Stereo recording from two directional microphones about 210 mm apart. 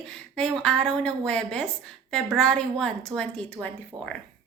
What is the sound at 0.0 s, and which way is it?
A woman's voice, 5° left (ahead or behind).